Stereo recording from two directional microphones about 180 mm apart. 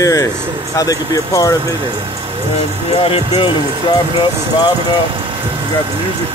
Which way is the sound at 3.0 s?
30° left (ahead or behind).